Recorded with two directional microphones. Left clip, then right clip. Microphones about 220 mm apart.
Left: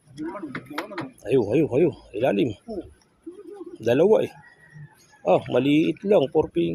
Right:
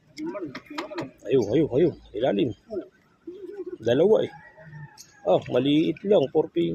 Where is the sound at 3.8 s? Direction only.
10° left (ahead or behind).